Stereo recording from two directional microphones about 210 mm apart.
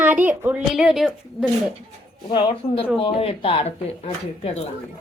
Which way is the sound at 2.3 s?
20° left (ahead or behind).